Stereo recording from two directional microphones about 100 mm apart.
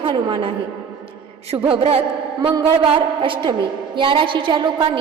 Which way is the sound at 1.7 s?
75° right (ahead or behind).